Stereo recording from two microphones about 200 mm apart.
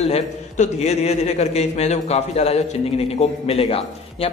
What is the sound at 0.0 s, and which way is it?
A man's voice, 30° left (ahead or behind).